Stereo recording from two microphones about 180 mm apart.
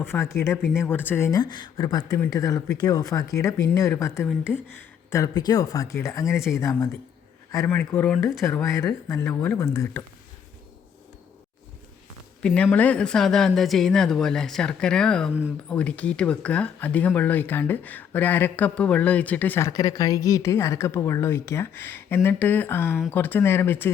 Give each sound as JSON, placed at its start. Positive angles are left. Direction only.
{"t": 0.0, "sound": "speech", "side_deg": 15}
{"t": 8.4, "sound": "speech", "side_deg": 15}
{"t": 12.4, "sound": "speech", "side_deg": 5}